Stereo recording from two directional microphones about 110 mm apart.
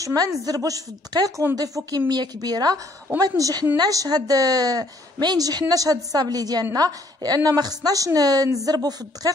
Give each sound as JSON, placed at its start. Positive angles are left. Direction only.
{"t": 0.0, "sound": "a woman's voice", "side_deg": -35}